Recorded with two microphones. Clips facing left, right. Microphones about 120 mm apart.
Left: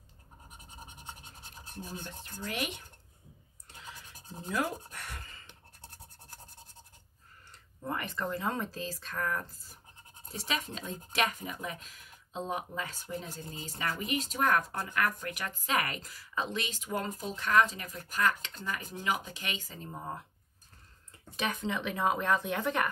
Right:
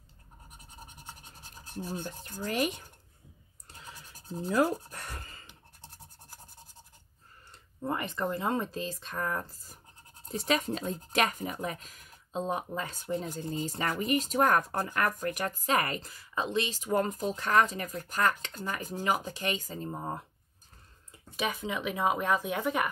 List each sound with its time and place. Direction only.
1.7 s a sound: 35° right (ahead or behind)
2.4 s speech: 40° right (ahead or behind)
4.4 s a sound: 35° right (ahead or behind)
7.8 s speech: 20° right (ahead or behind)
10.4 s speech: 40° right (ahead or behind); by 16.7 s 25° right (ahead or behind)
16.8 s speech: 40° right (ahead or behind)
21.4 s speech: 5° right (ahead or behind)